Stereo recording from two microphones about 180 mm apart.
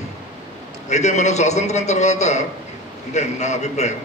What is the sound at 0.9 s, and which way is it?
A man's voice, 40° left (ahead or behind).